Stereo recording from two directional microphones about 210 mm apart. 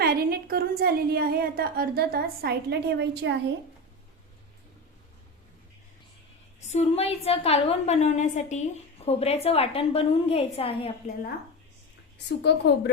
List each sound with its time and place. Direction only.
0.0 s a sound: 45° right (ahead or behind)
0.8 s a woman's voice: 45° right (ahead or behind)
6.7 s a woman's voice: 30° left (ahead or behind)
12.1 s a woman's voice: 55° left (ahead or behind)